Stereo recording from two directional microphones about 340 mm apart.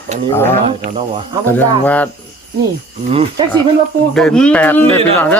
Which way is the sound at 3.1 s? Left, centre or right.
Centre.